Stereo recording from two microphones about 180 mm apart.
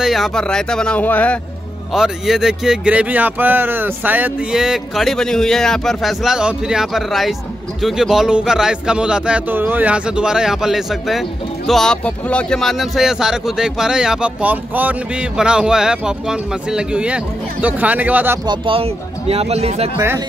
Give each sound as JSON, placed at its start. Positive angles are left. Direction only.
{"t": 0.0, "sound": "speech", "side_deg": 0}
{"t": 2.0, "sound": "speech", "side_deg": 0}
{"t": 18.5, "sound": "speech", "side_deg": -30}